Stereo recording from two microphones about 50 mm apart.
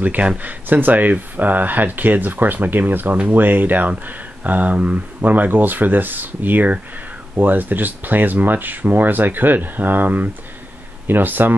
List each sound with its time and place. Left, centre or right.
0.0 s speech: right